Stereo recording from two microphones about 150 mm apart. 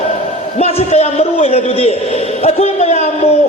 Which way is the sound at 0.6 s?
45° left (ahead or behind).